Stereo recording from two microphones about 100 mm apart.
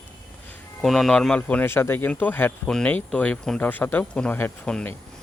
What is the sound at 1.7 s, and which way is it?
Speech, 25° left (ahead or behind).